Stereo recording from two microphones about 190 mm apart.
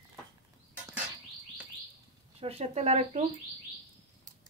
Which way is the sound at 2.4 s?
30° right (ahead or behind).